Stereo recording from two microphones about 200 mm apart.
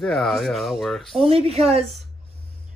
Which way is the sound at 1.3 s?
30° right (ahead or behind).